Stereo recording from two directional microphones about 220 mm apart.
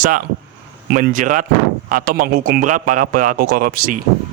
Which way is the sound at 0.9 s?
40° right (ahead or behind).